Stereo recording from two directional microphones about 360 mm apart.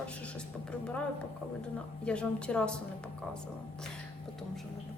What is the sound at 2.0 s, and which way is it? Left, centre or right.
Speech, centre.